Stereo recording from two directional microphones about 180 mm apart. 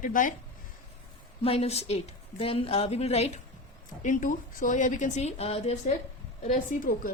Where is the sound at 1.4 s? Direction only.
35° left (ahead or behind).